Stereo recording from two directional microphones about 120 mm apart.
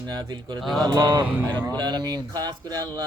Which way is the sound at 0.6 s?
Centre (ahead or behind).